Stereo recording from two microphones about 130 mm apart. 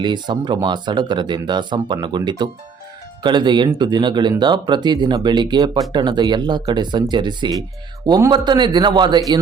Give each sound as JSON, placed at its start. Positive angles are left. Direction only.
{"t": 0.0, "sound": "speech", "side_deg": -35}